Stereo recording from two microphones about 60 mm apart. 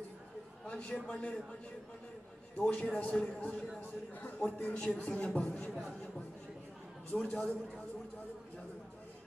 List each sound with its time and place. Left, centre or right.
0.7 s a sound: left
1.1 s speech: left
2.6 s speech: left
5.7 s speech: centre
7.2 s speech: centre